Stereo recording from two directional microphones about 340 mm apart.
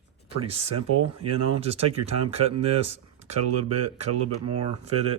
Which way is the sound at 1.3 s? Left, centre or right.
Right.